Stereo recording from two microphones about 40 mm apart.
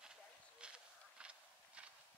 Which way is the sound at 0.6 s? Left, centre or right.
Right.